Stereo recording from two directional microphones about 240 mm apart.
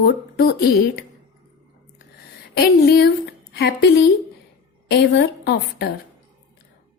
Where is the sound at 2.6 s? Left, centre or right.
Left.